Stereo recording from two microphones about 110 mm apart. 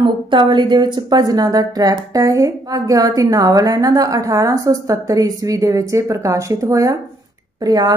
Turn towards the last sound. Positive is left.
turn(degrees=-35)  # may be behind; listen again after turning